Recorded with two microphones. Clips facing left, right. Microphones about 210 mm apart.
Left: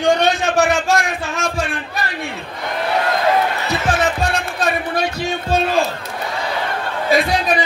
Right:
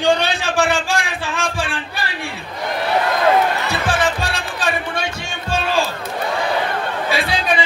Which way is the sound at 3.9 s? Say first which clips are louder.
Left 3 dB; 30° right (ahead or behind).